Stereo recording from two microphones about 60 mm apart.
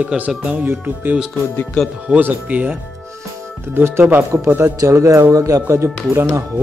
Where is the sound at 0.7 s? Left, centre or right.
Right.